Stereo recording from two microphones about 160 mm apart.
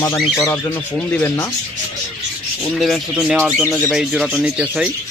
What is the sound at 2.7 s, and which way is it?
Speech, centre (ahead or behind).